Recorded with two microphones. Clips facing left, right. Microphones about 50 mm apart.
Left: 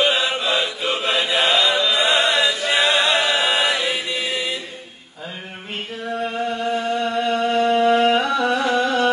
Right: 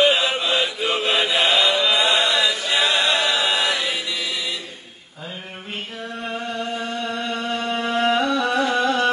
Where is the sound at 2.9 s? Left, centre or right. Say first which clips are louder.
Left 2 dB; left.